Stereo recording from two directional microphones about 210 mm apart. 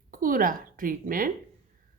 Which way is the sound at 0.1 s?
40° right (ahead or behind).